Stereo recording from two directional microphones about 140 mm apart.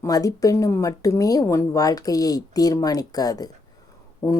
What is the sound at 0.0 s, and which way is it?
Speech, 25° left (ahead or behind).